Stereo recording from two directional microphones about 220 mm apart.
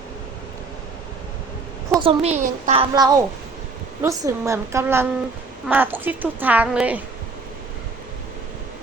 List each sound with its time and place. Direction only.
2.0 s a child's voice: 25° right (ahead or behind)
2.9 s speech: 15° right (ahead or behind)